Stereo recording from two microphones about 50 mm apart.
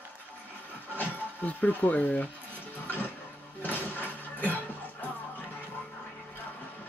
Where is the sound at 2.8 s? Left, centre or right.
Left.